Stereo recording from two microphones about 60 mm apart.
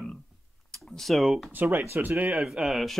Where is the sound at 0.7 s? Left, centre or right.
Centre.